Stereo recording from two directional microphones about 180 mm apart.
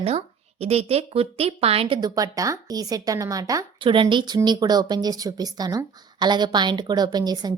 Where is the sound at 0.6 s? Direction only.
35° right (ahead or behind).